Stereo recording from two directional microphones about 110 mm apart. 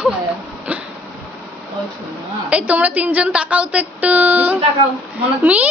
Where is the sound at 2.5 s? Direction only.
15° right (ahead or behind).